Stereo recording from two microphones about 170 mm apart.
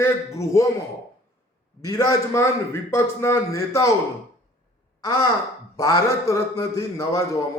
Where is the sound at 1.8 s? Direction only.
20° left (ahead or behind).